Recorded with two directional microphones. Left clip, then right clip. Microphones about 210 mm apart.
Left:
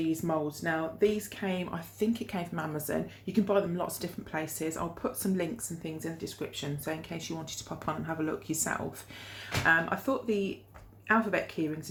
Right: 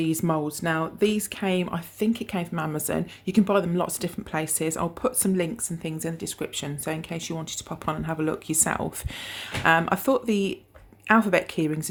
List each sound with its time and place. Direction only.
0.0 s speech: 45° right (ahead or behind)